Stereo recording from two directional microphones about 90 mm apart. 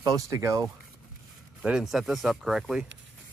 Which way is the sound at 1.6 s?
5° right (ahead or behind).